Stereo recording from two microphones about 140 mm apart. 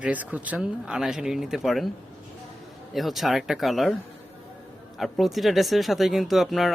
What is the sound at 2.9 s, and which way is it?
Speech, centre (ahead or behind).